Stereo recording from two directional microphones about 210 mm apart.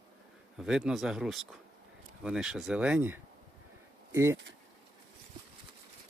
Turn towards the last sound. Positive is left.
turn(degrees=-10)  # may be behind; listen again after turning